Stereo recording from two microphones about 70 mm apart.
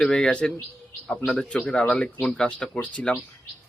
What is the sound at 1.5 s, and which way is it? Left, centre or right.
Speech, centre.